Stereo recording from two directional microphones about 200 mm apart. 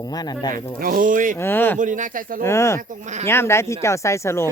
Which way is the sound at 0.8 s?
45° right (ahead or behind).